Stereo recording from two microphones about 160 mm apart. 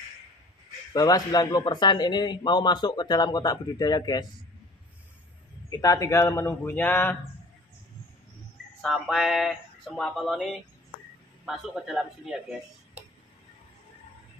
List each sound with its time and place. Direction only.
0.9 s a man's voice: 25° left (ahead or behind)
5.7 s a man's voice: 20° left (ahead or behind)
8.8 s speech: centre (ahead or behind)